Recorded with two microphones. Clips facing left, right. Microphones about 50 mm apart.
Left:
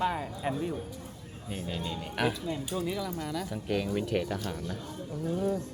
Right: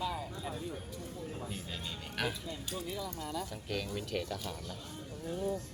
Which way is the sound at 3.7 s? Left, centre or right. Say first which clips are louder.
Left 8 dB; left.